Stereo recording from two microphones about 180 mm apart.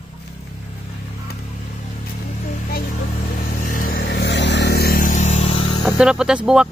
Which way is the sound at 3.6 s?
50° left (ahead or behind).